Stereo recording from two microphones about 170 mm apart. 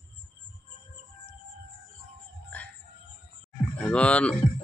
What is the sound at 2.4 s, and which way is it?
Music, 10° left (ahead or behind).